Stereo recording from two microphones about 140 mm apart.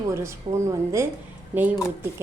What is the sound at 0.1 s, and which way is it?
Speech, 20° right (ahead or behind).